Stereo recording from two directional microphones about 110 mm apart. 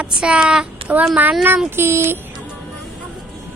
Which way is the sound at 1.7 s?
20° right (ahead or behind).